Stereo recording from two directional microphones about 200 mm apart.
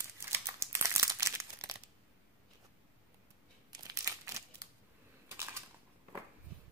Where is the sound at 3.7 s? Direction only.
20° right (ahead or behind).